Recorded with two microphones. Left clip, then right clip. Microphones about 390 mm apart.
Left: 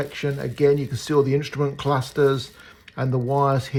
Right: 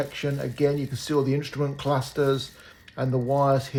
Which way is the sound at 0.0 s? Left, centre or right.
Centre.